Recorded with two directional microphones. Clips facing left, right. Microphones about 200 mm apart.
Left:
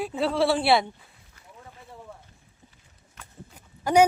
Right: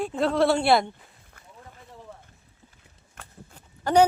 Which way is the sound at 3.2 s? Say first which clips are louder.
Right 2 dB; 50° right (ahead or behind).